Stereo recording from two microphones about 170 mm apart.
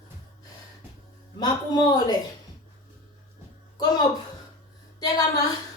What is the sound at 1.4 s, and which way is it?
Speech, 25° left (ahead or behind).